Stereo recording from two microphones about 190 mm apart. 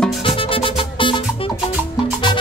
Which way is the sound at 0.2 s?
30° left (ahead or behind).